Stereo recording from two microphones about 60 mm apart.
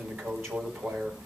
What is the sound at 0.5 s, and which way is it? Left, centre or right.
Speech, right.